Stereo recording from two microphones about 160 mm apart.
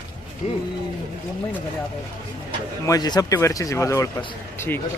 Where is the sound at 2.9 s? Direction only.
25° left (ahead or behind).